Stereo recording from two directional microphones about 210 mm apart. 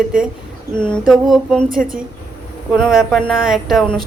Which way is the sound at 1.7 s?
40° right (ahead or behind).